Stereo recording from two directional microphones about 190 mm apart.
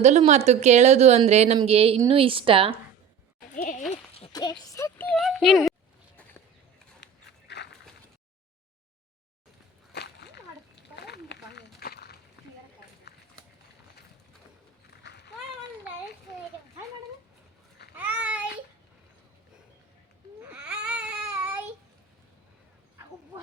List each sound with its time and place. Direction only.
0.0 s a woman's voice: 35° right (ahead or behind)
3.5 s goat: 40° left (ahead or behind)
4.3 s speech: 20° left (ahead or behind); by 5.7 s centre (ahead or behind)
7.0 s dog: 65° left (ahead or behind)
9.9 s splash: 60° left (ahead or behind)
10.9 s a sound: 60° left (ahead or behind)
13.1 s run: 60° left (ahead or behind)
15.0 s run: 65° left (ahead or behind)
17.9 s a sound: 10° right (ahead or behind)
20.5 s baby cry: 5° right (ahead or behind)